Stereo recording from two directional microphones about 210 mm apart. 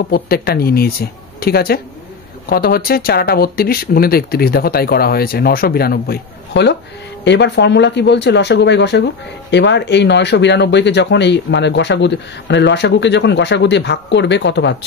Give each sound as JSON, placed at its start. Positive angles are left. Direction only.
{"t": 0.1, "sound": "speech", "side_deg": 45}